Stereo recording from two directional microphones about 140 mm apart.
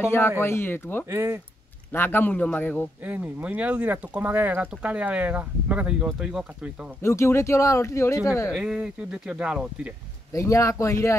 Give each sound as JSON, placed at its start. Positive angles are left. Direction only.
{"t": 0.0, "sound": "a man's voice", "side_deg": 20}
{"t": 1.0, "sound": "speech", "side_deg": -20}
{"t": 1.9, "sound": "a man's voice", "side_deg": 15}
{"t": 3.0, "sound": "speech", "side_deg": -10}
{"t": 7.0, "sound": "speech", "side_deg": 20}
{"t": 8.5, "sound": "speech", "side_deg": -5}
{"t": 10.3, "sound": "speech", "side_deg": 20}